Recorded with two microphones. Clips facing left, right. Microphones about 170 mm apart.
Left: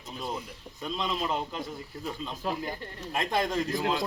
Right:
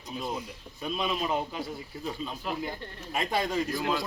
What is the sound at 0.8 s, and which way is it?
Speech, 10° right (ahead or behind).